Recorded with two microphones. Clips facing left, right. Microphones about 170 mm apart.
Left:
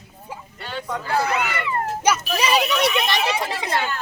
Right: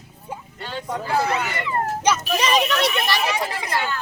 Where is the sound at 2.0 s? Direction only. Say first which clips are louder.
Even; 10° left (ahead or behind).